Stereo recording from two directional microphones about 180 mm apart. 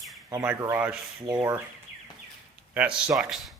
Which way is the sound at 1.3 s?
20° right (ahead or behind).